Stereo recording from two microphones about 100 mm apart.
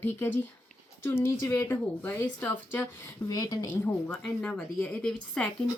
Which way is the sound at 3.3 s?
40° left (ahead or behind).